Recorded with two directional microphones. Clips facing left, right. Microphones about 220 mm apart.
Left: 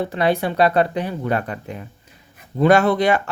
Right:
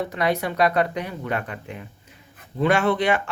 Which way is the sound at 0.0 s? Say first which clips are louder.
Left 4 dB; 30° left (ahead or behind).